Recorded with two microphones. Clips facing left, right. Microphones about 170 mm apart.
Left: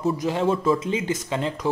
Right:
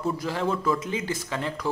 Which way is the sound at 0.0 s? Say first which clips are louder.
Left 5 dB; 20° left (ahead or behind).